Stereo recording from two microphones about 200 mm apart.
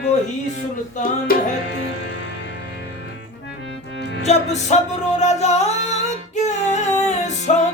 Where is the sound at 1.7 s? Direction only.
55° left (ahead or behind).